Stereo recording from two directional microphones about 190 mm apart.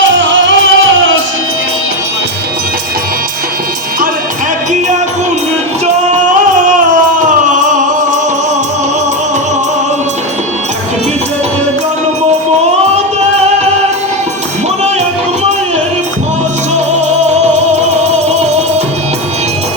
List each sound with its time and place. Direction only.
0.1 s music: 90° right